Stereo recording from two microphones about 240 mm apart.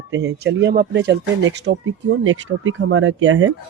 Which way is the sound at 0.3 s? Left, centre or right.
Right.